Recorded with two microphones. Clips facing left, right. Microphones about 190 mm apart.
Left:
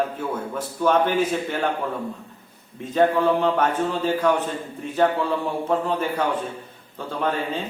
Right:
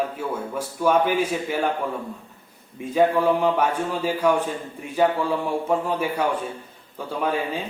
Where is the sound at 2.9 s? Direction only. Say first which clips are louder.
Even; 10° right (ahead or behind).